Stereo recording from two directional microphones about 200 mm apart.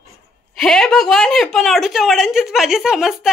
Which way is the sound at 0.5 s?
Centre (ahead or behind).